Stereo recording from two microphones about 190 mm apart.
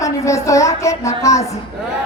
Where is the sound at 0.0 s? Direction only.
15° left (ahead or behind).